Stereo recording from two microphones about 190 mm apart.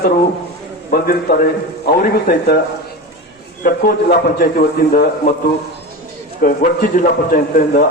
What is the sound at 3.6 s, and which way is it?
A man's voice, 50° left (ahead or behind).